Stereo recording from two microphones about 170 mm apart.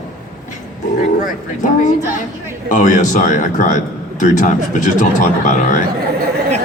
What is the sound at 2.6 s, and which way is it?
Speech, 45° left (ahead or behind).